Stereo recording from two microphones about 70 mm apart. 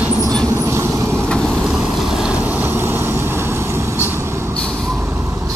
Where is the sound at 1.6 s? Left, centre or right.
Centre; by 4.5 s right.